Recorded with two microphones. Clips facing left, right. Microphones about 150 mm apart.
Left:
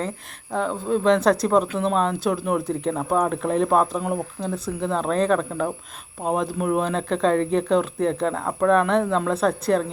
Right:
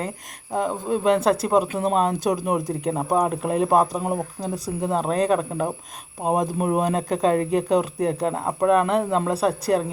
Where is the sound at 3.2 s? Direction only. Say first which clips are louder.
Left 1 dB; 10° right (ahead or behind).